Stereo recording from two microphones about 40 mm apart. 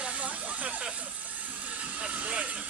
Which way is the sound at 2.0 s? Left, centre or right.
Right.